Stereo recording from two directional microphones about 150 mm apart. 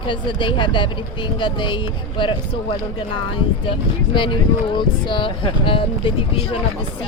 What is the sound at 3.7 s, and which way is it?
Speech, 35° left (ahead or behind).